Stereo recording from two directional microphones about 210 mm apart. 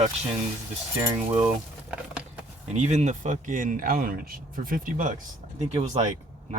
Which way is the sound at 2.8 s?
35° right (ahead or behind).